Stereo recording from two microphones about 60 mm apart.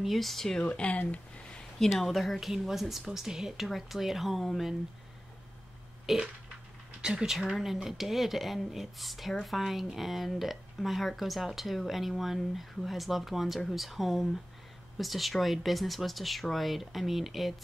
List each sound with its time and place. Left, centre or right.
0.0 s speech: centre
0.6 s speech: centre
1.8 s speech: centre
6.1 s speech: centre